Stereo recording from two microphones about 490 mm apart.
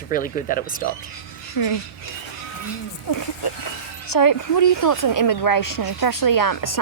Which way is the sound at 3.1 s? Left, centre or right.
Left.